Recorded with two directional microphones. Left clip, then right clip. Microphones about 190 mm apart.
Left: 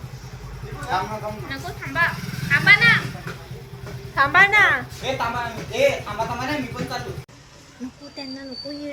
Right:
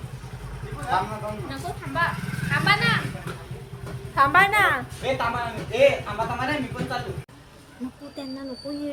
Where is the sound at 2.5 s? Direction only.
25° right (ahead or behind).